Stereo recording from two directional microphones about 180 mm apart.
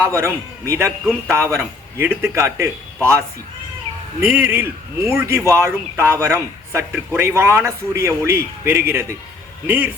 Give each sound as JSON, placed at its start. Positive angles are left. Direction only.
{"t": 0.0, "sound": "a man's voice", "side_deg": -15}